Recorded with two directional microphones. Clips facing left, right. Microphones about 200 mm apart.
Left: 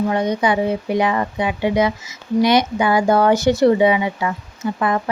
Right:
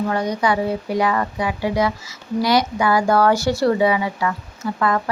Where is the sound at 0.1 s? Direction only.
20° left (ahead or behind).